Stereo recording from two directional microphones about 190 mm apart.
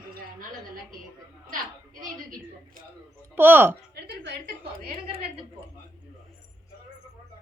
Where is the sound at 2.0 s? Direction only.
45° right (ahead or behind).